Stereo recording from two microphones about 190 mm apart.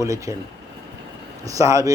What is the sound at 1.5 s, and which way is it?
Speech, 15° right (ahead or behind).